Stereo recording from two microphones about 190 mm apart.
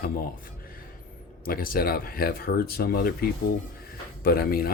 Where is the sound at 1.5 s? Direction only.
50° left (ahead or behind).